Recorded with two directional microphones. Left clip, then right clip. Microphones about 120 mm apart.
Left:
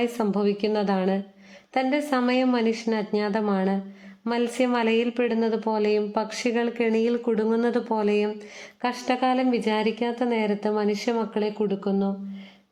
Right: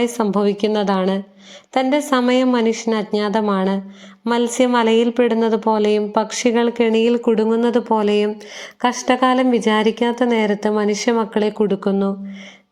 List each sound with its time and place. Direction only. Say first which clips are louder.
0.0 s speech: right 7 dB; 15° right (ahead or behind)
11.8 s speech: right 7 dB; 45° right (ahead or behind)